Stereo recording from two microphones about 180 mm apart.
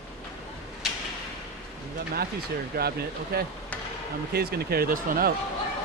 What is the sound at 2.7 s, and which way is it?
Speech, 60° right (ahead or behind).